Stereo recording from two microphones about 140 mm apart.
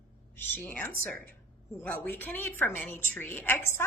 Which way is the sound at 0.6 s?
10° left (ahead or behind).